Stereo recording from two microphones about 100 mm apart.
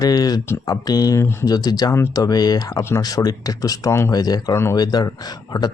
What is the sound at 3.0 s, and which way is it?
Speech, 40° left (ahead or behind).